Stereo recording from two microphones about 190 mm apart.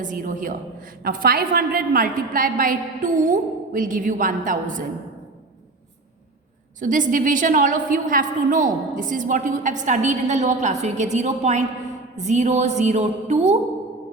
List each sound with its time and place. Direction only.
0.0 s a woman's voice: 45° right (ahead or behind)
6.7 s a woman's voice: 40° right (ahead or behind)